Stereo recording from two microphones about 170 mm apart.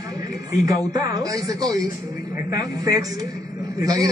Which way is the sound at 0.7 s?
20° right (ahead or behind).